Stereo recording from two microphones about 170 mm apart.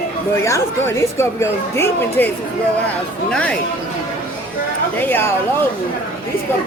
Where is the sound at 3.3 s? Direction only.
5° left (ahead or behind).